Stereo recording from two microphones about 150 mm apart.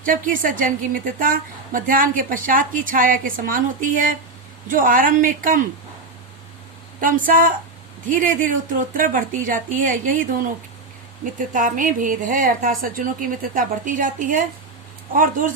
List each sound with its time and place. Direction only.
0.0 s a woman's voice: 65° right (ahead or behind)
7.0 s a woman's voice: 65° right (ahead or behind)